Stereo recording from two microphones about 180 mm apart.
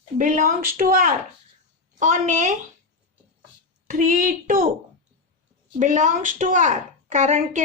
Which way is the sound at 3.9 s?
50° right (ahead or behind).